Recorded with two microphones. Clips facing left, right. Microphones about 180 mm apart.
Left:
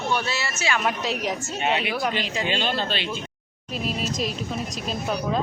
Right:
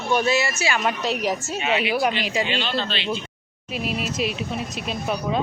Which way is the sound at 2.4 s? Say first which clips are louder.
Even; 45° left (ahead or behind).